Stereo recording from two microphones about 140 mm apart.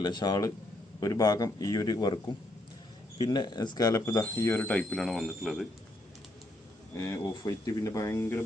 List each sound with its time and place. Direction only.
0.0 s speech: 30° left (ahead or behind)
3.2 s speech: 30° left (ahead or behind); by 5.6 s centre (ahead or behind)
6.9 s speech: 20° left (ahead or behind)